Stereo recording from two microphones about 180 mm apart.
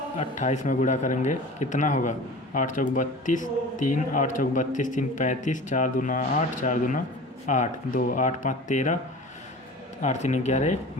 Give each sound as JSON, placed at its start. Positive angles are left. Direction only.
{"t": 0.2, "sound": "speech", "side_deg": 40}
{"t": 10.0, "sound": "speech", "side_deg": 40}